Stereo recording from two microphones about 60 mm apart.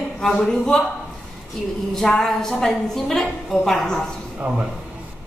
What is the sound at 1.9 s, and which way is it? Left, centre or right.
A woman's voice, centre.